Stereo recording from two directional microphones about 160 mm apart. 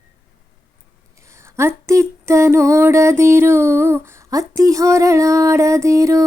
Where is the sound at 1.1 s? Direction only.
20° right (ahead or behind).